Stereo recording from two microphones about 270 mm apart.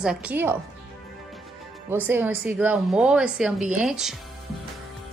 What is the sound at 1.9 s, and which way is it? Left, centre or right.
A woman's voice, centre.